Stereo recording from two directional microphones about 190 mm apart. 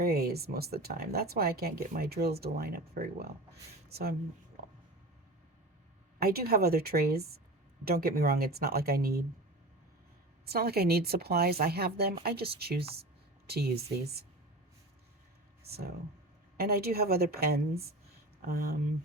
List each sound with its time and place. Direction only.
0.0 s speech: 55° right (ahead or behind)
6.1 s speech: 55° right (ahead or behind)
10.4 s speech: 55° right (ahead or behind)
14.0 s speech: 55° right (ahead or behind)
15.6 s speech: 55° right (ahead or behind)